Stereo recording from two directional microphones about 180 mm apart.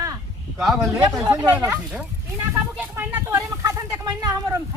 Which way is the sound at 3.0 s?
10° right (ahead or behind).